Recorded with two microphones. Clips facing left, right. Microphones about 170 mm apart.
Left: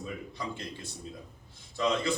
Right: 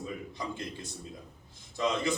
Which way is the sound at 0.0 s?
20° right (ahead or behind).